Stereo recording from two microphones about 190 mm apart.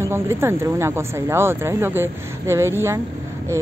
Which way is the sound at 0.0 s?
15° right (ahead or behind).